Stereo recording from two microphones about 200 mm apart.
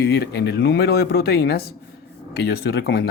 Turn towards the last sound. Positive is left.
turn(degrees=50)  # may be behind; listen again after turning